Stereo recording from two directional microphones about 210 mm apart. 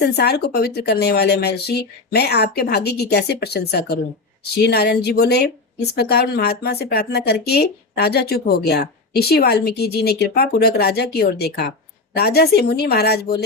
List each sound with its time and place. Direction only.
0.0 s speech: 50° left (ahead or behind)